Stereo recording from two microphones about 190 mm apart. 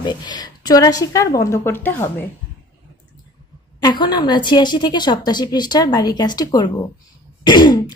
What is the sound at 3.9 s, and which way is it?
A woman's voice, 20° left (ahead or behind).